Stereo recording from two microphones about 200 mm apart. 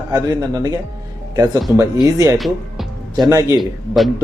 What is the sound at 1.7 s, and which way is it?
Speech, 15° right (ahead or behind).